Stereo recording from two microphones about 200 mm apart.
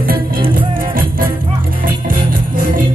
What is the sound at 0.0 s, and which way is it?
Music, 45° right (ahead or behind).